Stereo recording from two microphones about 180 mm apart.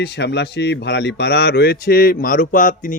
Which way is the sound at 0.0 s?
70° left (ahead or behind).